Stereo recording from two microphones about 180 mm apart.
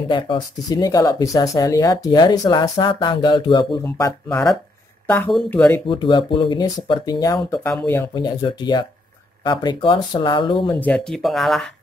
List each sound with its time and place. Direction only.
0.1 s speech: 25° left (ahead or behind)
4.3 s speech: 5° left (ahead or behind)
5.9 s speech: 25° left (ahead or behind)
7.6 s speech: 10° left (ahead or behind)
8.1 s speech: 25° left (ahead or behind)
10.7 s speech: 10° left (ahead or behind)